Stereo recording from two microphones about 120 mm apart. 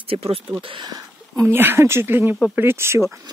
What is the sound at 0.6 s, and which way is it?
Speech, 45° right (ahead or behind).